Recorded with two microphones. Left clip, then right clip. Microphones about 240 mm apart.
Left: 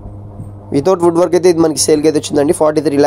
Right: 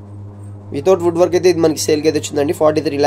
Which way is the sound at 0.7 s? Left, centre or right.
Left.